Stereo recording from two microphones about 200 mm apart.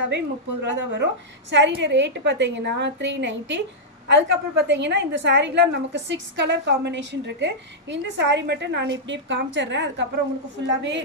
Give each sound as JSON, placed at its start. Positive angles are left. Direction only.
{"t": 0.1, "sound": "a woman's voice", "side_deg": -60}